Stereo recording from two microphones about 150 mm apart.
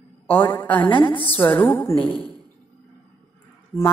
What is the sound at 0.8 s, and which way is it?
Speech, 30° left (ahead or behind).